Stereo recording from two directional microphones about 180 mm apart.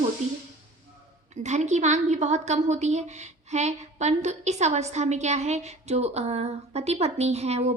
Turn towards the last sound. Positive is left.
turn(degrees=-35)  # may be behind; listen again after turning